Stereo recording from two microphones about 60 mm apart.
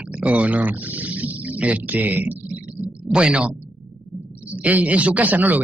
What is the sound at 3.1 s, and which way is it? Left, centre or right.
Speech, centre.